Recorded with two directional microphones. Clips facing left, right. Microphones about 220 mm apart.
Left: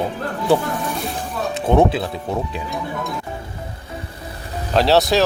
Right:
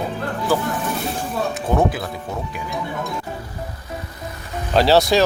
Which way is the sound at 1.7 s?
30° left (ahead or behind).